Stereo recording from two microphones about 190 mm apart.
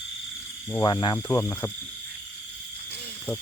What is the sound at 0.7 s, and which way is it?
Speech, 20° left (ahead or behind).